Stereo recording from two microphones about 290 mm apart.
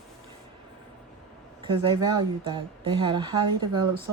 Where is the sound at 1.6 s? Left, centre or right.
Centre.